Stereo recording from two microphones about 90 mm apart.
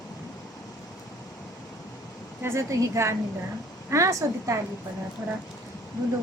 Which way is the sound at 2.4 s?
35° right (ahead or behind).